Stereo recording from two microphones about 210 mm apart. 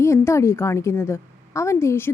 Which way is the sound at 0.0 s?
15° left (ahead or behind).